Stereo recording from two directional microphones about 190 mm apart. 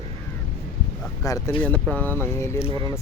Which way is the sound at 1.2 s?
15° left (ahead or behind).